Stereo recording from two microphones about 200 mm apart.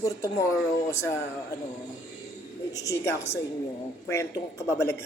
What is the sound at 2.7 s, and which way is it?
Speech, 15° left (ahead or behind).